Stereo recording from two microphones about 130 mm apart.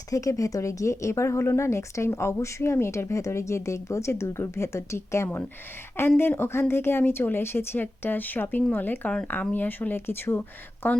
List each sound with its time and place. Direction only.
0.1 s speech: 25° left (ahead or behind)